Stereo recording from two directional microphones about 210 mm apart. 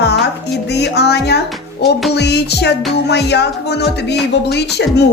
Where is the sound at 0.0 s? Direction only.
55° left (ahead or behind).